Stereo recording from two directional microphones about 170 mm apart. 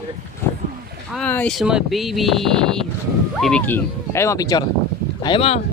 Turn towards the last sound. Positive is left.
turn(degrees=35)  # may be behind; listen again after turning